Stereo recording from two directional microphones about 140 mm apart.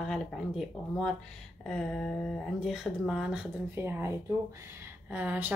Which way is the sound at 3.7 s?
15° right (ahead or behind).